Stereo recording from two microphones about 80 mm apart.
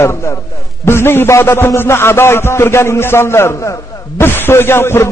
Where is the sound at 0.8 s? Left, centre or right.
Left.